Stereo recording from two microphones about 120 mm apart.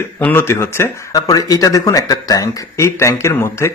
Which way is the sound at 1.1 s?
30° left (ahead or behind).